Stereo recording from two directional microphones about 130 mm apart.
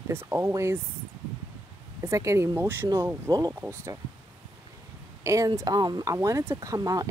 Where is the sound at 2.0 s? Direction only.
25° right (ahead or behind).